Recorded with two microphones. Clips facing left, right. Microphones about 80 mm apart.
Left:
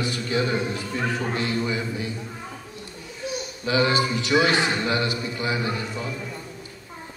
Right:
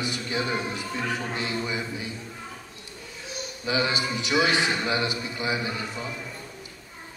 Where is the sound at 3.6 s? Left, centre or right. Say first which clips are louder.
Left 5 dB; right.